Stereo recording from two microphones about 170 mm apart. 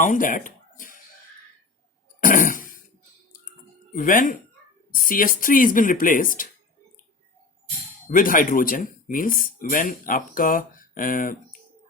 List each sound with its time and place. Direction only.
0.0 s speech: 50° left (ahead or behind)
2.2 s a sound: 50° left (ahead or behind)
3.9 s speech: 55° left (ahead or behind)
8.0 s speech: 55° left (ahead or behind)